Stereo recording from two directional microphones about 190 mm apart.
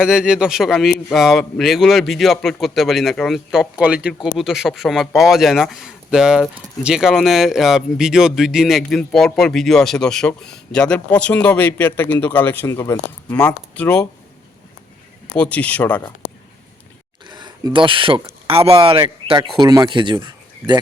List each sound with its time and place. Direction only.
0.0 s speech: 5° right (ahead or behind)
15.4 s speech: 5° left (ahead or behind)
17.2 s a sound: 20° right (ahead or behind)
17.7 s speech: 25° right (ahead or behind)